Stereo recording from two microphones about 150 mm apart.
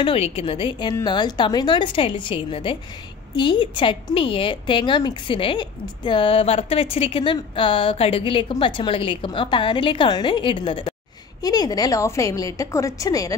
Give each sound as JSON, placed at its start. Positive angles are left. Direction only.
{"t": 0.0, "sound": "a woman's voice", "side_deg": 40}